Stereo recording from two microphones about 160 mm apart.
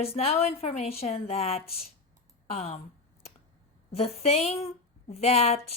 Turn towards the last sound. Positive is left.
turn(degrees=40)  # may be behind; listen again after turning